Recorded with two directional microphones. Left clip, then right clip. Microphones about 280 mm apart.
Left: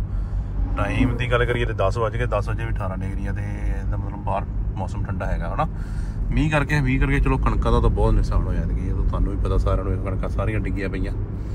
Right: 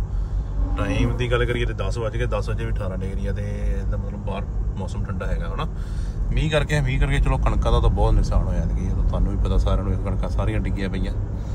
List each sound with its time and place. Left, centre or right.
0.7 s speech: centre
5.2 s speech: centre